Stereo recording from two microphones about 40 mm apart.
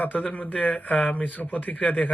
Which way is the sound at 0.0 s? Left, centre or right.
Left.